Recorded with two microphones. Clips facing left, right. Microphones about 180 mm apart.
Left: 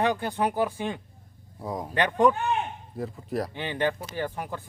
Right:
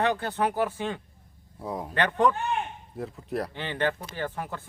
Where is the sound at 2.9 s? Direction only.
Centre (ahead or behind).